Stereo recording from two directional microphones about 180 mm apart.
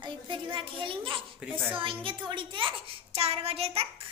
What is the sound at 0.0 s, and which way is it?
A child's voice, 25° right (ahead or behind).